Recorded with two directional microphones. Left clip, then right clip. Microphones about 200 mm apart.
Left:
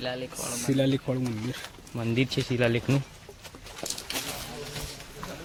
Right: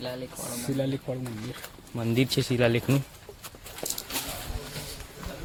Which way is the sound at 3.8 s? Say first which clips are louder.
Even; 15° right (ahead or behind).